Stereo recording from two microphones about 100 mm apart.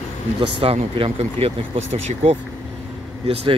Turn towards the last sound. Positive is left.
turn(degrees=-75)  # may be behind; listen again after turning